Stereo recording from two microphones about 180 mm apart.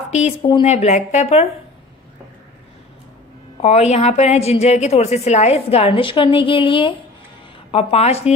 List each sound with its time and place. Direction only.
0.1 s a woman's voice: 40° left (ahead or behind)
3.6 s a woman's voice: 35° left (ahead or behind)